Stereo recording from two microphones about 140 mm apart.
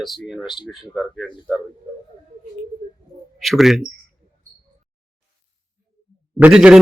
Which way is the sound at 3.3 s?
Centre (ahead or behind).